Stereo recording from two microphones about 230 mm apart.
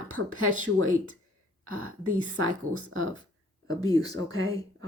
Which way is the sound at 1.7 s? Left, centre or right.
Right.